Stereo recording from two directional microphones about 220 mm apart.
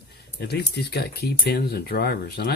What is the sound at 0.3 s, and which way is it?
Speech, 45° left (ahead or behind).